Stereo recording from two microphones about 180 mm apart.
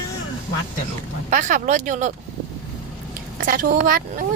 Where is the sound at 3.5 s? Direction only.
50° right (ahead or behind).